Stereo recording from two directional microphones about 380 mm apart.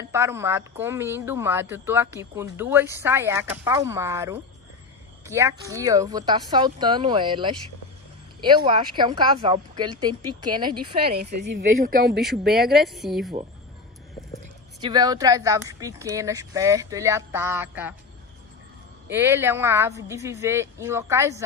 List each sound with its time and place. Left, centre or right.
0.1 s speech: centre
11.1 s speech: right
12.2 s a woman's voice: centre
14.8 s speech: centre
19.0 s speech: centre